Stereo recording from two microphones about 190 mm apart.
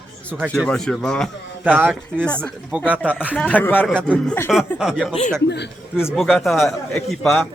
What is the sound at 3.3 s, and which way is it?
A man's voice, 10° left (ahead or behind).